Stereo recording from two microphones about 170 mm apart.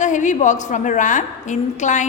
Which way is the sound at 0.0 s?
45° left (ahead or behind).